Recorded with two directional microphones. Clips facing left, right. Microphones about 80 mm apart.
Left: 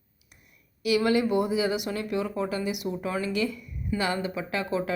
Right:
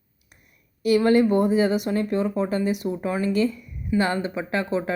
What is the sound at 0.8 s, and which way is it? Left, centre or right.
Speech, right.